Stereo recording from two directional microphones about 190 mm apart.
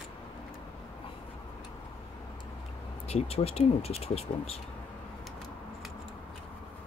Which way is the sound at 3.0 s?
30° left (ahead or behind).